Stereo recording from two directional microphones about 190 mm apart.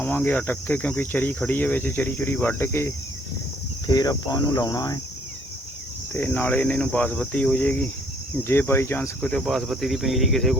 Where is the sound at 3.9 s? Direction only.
20° left (ahead or behind).